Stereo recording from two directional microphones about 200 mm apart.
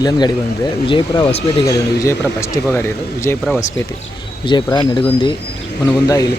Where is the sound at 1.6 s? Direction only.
15° left (ahead or behind).